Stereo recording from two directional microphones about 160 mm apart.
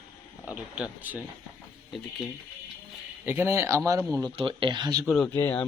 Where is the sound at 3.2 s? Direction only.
15° right (ahead or behind).